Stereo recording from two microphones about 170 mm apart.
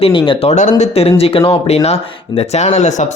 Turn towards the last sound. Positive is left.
turn(degrees=45)  # may be behind; listen again after turning